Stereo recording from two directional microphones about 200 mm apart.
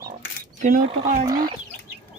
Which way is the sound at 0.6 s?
40° right (ahead or behind).